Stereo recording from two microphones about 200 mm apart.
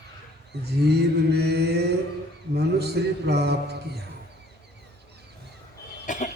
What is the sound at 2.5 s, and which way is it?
A man's voice, 55° right (ahead or behind).